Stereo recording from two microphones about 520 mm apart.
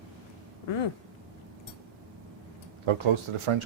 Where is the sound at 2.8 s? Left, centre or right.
Right.